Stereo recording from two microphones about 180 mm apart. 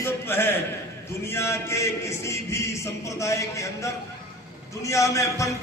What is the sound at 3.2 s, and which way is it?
A man's voice, 15° left (ahead or behind).